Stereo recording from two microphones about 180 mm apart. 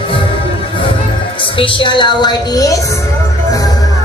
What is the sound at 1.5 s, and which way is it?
Music, 30° left (ahead or behind).